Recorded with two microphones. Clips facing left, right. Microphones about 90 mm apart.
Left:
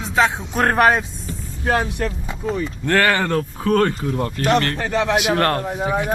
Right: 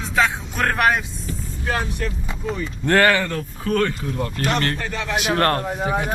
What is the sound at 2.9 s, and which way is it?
Speech, 5° right (ahead or behind).